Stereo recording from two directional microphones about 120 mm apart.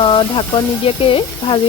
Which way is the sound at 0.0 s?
45° left (ahead or behind).